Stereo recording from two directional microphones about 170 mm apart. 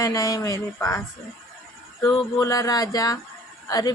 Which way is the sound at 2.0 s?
20° left (ahead or behind).